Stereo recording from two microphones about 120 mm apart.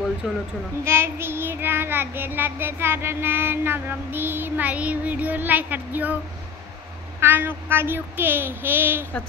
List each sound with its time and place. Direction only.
0.2 s speech: centre (ahead or behind)
0.8 s child singing: 20° right (ahead or behind)
7.2 s child singing: 15° right (ahead or behind)